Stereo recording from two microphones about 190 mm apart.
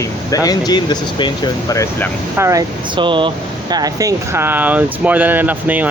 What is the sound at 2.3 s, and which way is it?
Speech, 15° right (ahead or behind).